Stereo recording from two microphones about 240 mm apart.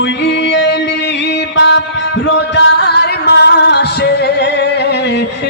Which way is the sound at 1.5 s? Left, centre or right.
Left.